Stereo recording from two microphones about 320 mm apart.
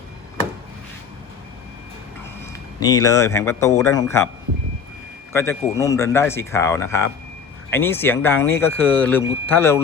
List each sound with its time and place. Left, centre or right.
2.5 s speech: centre
5.3 s speech: centre